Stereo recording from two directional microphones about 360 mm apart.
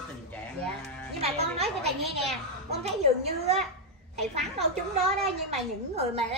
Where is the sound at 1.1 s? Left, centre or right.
Centre.